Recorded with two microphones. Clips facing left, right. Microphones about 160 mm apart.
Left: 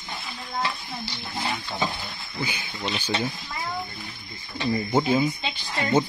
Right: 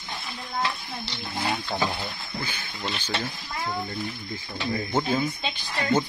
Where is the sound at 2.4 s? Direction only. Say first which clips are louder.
Left 6 dB; 10° left (ahead or behind).